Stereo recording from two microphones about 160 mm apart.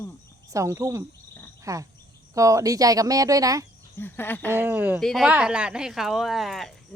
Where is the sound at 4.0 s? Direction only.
15° left (ahead or behind).